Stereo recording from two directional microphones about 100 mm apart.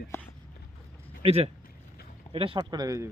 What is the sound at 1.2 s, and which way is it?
Speech, 90° right.